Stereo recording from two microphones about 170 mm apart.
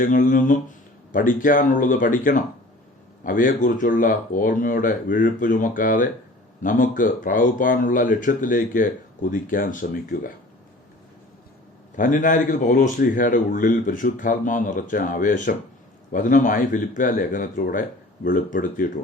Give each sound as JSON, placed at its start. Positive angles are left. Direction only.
{"t": 0.0, "sound": "a man's voice", "side_deg": 50}
{"t": 11.9, "sound": "a man's voice", "side_deg": 50}